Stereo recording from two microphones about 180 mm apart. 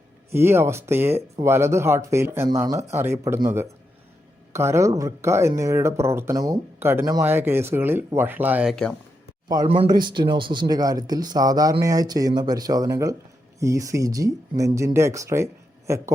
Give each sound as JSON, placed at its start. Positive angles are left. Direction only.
{"t": 0.3, "sound": "speech", "side_deg": -15}
{"t": 9.6, "sound": "speech", "side_deg": -30}